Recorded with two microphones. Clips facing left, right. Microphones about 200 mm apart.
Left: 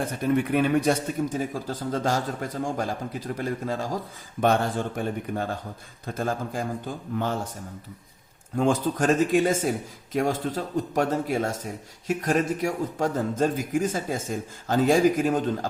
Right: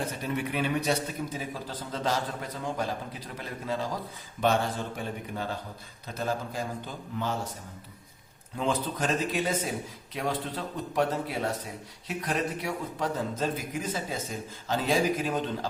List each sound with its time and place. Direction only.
0.2 s speech: 50° left (ahead or behind)
8.5 s speech: 50° left (ahead or behind)